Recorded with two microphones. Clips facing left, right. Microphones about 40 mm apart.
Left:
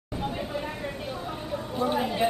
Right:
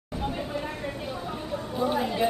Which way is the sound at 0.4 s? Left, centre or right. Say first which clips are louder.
Even; centre.